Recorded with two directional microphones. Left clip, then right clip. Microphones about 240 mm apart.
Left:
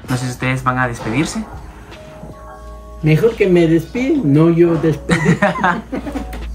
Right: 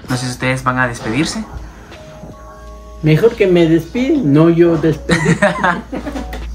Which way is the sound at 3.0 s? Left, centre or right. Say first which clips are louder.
Right 2 dB; centre.